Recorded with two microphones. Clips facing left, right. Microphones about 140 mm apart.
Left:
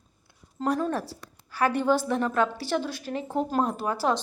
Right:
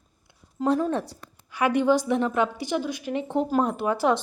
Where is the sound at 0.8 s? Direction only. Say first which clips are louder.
Right 2 dB; 20° right (ahead or behind).